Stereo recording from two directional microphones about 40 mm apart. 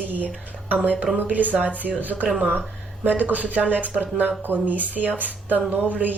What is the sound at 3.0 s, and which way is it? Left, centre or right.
A man's voice, right.